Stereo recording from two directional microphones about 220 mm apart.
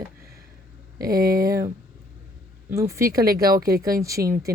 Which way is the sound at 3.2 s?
45° right (ahead or behind).